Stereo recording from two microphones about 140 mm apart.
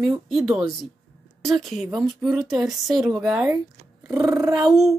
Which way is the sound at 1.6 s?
Centre (ahead or behind).